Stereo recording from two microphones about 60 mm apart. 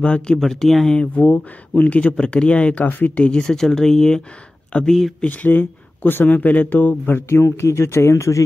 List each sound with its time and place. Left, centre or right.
0.0 s speech: centre
0.4 s speech: centre
0.9 s speech: left
4.7 s speech: left
7.1 s a man's voice: left